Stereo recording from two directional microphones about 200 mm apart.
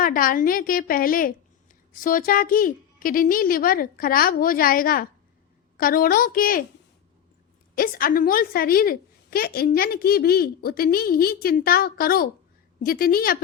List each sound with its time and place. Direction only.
0.0 s a woman's voice: 45° left (ahead or behind)
7.8 s a woman's voice: 45° left (ahead or behind)